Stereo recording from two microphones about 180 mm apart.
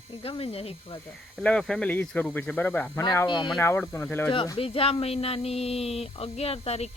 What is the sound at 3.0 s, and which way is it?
Speech, 20° left (ahead or behind).